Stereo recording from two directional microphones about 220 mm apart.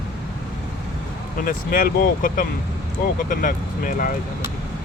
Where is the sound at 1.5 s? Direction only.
40° left (ahead or behind).